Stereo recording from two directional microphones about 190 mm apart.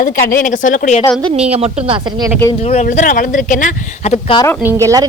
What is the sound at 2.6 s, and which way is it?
Speech, 35° left (ahead or behind).